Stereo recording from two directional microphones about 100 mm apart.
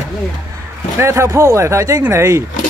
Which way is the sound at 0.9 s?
30° right (ahead or behind).